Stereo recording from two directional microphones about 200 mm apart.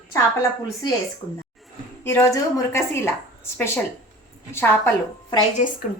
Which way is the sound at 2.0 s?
10° left (ahead or behind).